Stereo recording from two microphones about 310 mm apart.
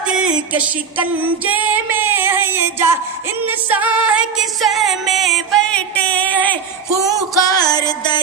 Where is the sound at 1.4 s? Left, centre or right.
Centre.